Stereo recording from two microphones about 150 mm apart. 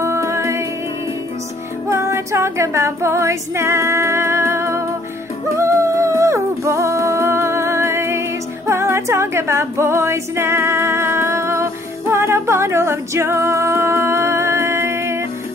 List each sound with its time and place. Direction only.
0.0 s music: 20° right (ahead or behind)
1.9 s music: 20° right (ahead or behind)